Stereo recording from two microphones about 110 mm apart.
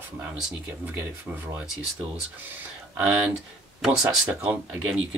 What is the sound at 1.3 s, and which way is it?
Speech, 20° right (ahead or behind).